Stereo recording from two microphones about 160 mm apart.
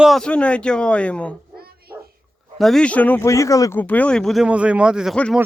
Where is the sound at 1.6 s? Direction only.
70° right (ahead or behind).